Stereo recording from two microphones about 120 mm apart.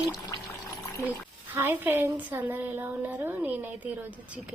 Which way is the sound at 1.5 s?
20° right (ahead or behind).